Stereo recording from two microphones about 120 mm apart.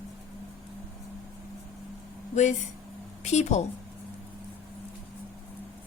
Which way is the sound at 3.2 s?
70° left (ahead or behind).